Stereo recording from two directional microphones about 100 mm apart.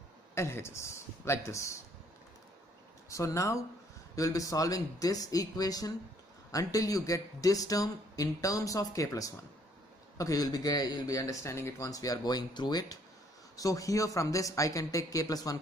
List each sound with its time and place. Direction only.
0.3 s speech: 25° left (ahead or behind)
3.1 s speech: 30° left (ahead or behind)